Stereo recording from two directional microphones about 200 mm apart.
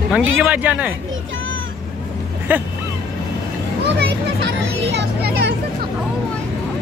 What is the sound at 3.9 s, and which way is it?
A child's voice, 55° right (ahead or behind).